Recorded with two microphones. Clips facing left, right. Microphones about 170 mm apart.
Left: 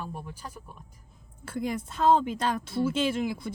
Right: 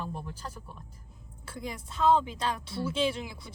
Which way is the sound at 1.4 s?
55° left (ahead or behind).